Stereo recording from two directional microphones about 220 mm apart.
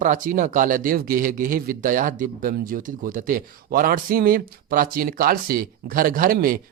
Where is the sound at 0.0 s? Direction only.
35° right (ahead or behind).